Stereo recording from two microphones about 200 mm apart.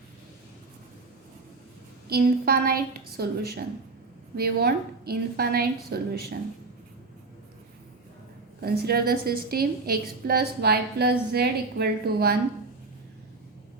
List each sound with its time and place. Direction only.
2.0 s a woman's voice: 50° right (ahead or behind)
8.6 s a woman's voice: 50° right (ahead or behind)